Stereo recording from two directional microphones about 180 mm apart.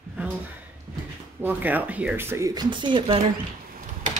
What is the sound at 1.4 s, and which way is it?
Speech, 10° right (ahead or behind).